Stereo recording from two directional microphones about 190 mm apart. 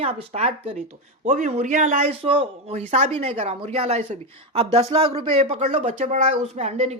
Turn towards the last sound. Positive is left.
turn(degrees=-35)  # may be behind; listen again after turning